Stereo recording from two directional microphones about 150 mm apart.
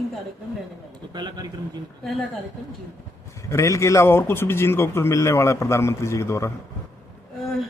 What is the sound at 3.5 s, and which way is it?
A man's voice, 20° left (ahead or behind).